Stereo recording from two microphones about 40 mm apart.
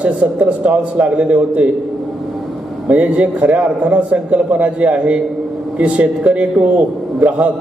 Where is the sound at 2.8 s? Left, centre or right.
Right.